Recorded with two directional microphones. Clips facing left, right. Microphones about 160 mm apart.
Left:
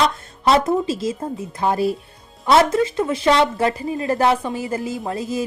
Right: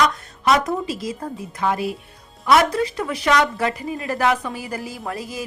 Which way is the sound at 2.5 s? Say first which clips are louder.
Left 2 dB; 25° left (ahead or behind).